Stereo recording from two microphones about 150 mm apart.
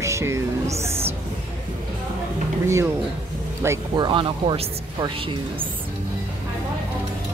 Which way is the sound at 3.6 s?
20° right (ahead or behind).